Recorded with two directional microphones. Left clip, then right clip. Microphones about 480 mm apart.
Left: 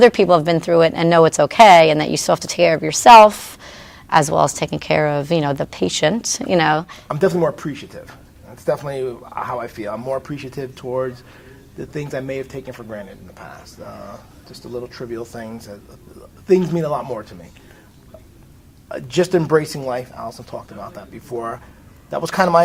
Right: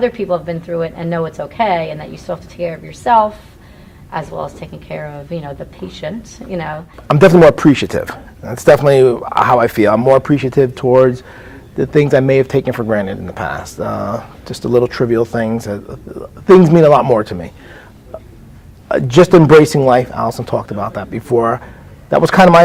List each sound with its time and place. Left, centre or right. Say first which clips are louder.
0.0 s a woman's voice: left 5 dB; left
7.1 s speech: right 11 dB; right
18.9 s speech: right 10 dB; right